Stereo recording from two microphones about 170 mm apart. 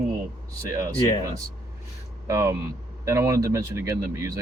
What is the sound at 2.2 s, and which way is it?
Speech, 20° right (ahead or behind).